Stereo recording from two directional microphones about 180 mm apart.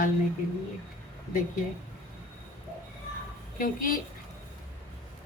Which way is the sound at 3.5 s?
50° left (ahead or behind).